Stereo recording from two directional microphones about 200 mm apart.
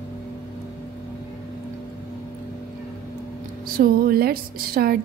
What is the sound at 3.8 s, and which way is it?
Speech, 45° right (ahead or behind).